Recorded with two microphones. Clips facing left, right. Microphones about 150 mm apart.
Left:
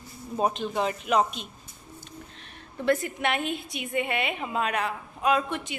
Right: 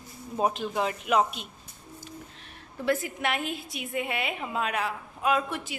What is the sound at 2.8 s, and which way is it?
A woman's voice, 5° right (ahead or behind).